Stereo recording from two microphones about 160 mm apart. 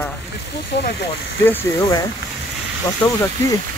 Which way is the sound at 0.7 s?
90° left.